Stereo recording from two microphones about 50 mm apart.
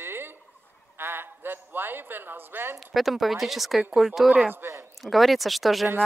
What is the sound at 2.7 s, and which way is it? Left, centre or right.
A woman's voice, centre.